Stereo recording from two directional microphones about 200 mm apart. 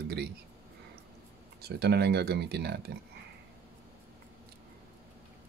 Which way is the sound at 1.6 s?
55° right (ahead or behind).